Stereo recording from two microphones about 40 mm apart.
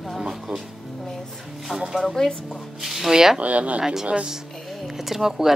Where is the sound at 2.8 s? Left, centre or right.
Centre.